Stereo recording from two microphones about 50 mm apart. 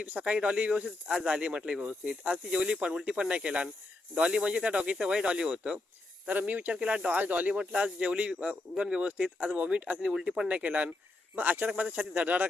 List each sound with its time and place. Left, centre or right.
0.0 s speech: right
6.2 s speech: right
7.6 s speech: centre
10.1 s speech: centre
10.5 s speech: right